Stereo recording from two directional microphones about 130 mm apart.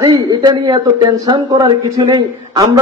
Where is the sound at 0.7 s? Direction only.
30° right (ahead or behind).